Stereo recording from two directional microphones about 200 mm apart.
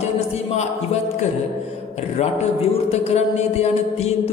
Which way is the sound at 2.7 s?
30° left (ahead or behind).